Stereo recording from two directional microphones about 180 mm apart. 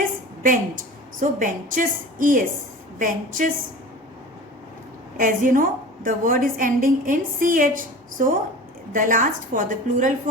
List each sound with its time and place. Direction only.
0.4 s a woman's voice: 50° right (ahead or behind)
5.1 s a woman's voice: 50° right (ahead or behind)